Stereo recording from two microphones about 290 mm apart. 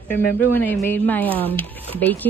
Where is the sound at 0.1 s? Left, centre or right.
Centre.